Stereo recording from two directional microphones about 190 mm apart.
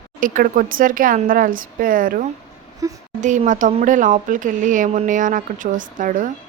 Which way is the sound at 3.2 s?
40° right (ahead or behind).